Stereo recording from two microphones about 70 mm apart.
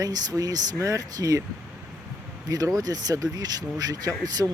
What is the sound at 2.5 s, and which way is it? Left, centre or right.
Speech, right.